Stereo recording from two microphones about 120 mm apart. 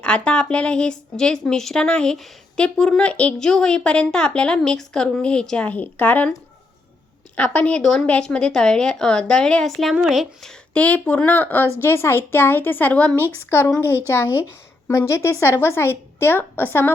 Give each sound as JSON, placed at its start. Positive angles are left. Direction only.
{"t": 0.0, "sound": "a woman's voice", "side_deg": 10}
{"t": 7.3, "sound": "a woman's voice", "side_deg": 10}